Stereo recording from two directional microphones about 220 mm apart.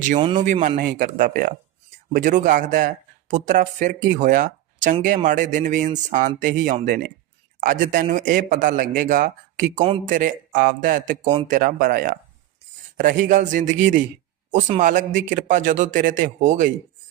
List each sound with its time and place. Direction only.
0.3 s speech: 35° right (ahead or behind)